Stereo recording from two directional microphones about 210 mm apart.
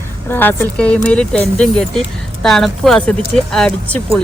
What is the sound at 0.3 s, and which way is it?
Speech, 10° left (ahead or behind).